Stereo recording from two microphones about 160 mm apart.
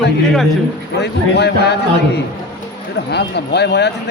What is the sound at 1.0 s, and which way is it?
Speech, 90° left.